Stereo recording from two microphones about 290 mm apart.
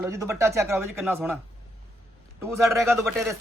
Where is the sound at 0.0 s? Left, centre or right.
Centre.